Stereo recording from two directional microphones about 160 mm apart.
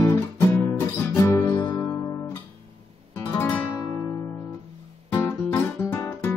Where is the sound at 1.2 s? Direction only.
20° left (ahead or behind).